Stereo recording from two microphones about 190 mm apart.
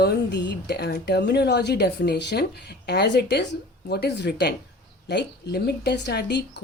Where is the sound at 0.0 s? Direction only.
60° left (ahead or behind).